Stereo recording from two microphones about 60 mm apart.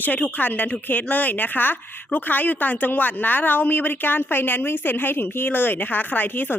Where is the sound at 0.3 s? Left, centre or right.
Left.